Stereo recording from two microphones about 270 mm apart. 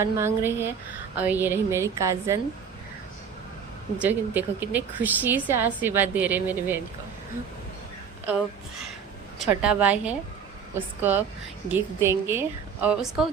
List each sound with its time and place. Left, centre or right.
0.0 s a woman's voice: centre
4.0 s a woman's voice: centre
9.4 s a woman's voice: centre